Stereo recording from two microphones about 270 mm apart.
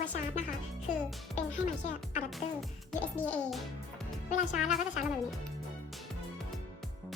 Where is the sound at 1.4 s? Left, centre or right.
Left.